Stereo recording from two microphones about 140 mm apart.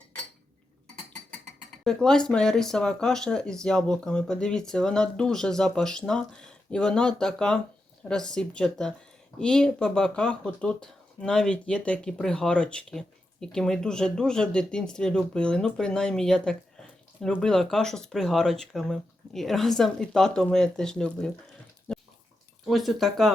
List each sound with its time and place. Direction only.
1.8 s speech: 5° left (ahead or behind)
21.9 s dog: 5° left (ahead or behind)
22.6 s speech: centre (ahead or behind)